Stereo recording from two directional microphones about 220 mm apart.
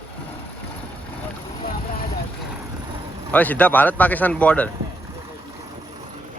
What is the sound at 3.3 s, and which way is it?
Speech, 5° left (ahead or behind).